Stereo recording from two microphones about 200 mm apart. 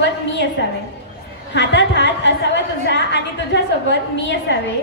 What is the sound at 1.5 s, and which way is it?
A woman's voice, 60° left (ahead or behind).